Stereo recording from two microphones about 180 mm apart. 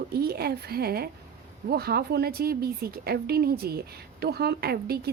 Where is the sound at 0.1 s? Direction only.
60° right (ahead or behind).